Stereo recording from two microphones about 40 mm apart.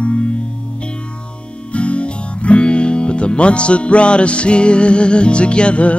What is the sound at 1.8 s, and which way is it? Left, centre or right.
Music, left.